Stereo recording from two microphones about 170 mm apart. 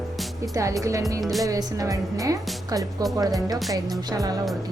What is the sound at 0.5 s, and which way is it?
Speech, 20° right (ahead or behind).